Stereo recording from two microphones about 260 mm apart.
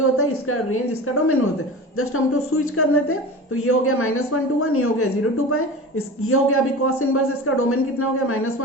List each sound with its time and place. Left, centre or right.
0.2 s a woman's voice: left
6.2 s a man's voice: left